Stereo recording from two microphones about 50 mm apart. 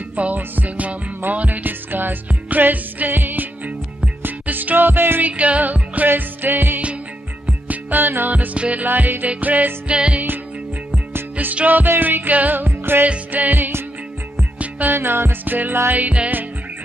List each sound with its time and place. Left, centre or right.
0.1 s music: right
5.2 s music: right
7.4 s music: right
8.5 s music: right
8.8 s music: right
9.9 s music: right
11.3 s music: right
13.0 s music: right
15.0 s music: right